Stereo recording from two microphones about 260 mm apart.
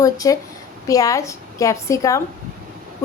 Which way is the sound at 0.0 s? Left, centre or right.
Centre.